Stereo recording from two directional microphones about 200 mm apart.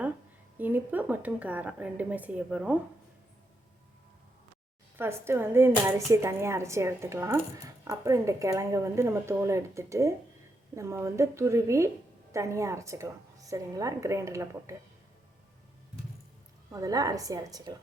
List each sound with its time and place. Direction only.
0.6 s speech: 10° right (ahead or behind)
4.9 s speech: 10° right (ahead or behind)
16.7 s speech: 15° right (ahead or behind)